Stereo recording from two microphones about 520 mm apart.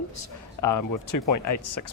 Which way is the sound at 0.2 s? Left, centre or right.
Left.